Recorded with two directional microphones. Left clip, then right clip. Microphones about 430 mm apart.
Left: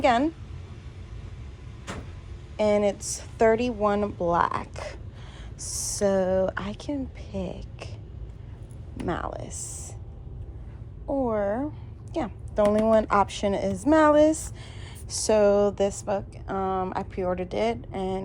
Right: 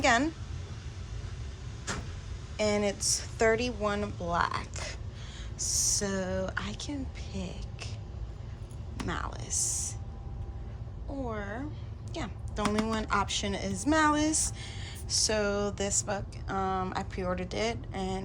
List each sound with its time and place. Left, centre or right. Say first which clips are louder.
0.0 s speech: left 4 dB; centre
2.6 s a woman's voice: left 6 dB; centre
9.0 s speech: left 6 dB; centre
11.1 s a woman's voice: left 12 dB; centre
12.1 s a sound: left 11 dB; centre
12.8 s speech: left 10 dB; centre